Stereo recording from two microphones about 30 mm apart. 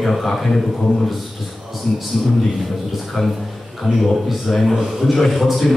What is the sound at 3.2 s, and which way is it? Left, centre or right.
Speech, centre.